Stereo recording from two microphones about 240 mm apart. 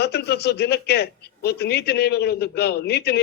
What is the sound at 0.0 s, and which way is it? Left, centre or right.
A man's voice, left.